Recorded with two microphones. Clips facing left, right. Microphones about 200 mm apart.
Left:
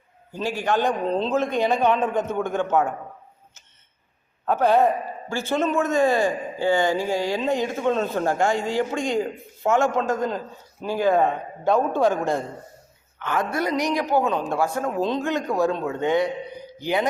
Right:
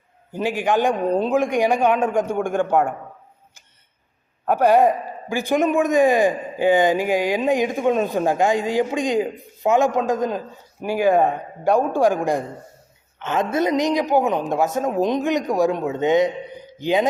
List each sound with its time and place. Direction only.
0.3 s a man's voice: 15° right (ahead or behind)
4.4 s a man's voice: 15° right (ahead or behind)